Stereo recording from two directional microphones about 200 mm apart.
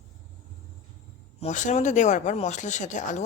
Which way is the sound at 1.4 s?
35° left (ahead or behind).